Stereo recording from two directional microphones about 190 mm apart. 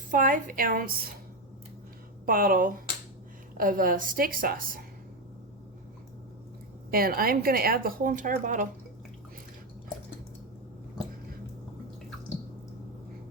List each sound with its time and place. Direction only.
0.1 s speech: 45° right (ahead or behind)
2.2 s speech: 50° right (ahead or behind)
6.9 s speech: 50° right (ahead or behind)